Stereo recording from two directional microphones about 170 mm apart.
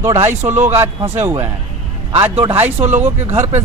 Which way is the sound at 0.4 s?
15° right (ahead or behind).